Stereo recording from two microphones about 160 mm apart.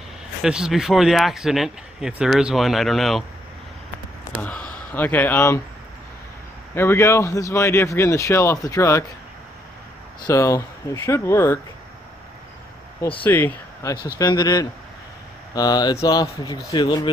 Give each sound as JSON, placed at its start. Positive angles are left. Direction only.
{"t": 0.4, "sound": "speech", "side_deg": -5}
{"t": 4.4, "sound": "speech", "side_deg": 10}
{"t": 6.7, "sound": "speech", "side_deg": 15}
{"t": 10.2, "sound": "speech", "side_deg": 20}
{"t": 13.2, "sound": "speech", "side_deg": 10}
{"t": 14.0, "sound": "speech", "side_deg": 25}